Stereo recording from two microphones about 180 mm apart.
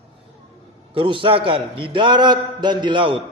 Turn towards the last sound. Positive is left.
turn(degrees=-25)  # may be behind; listen again after turning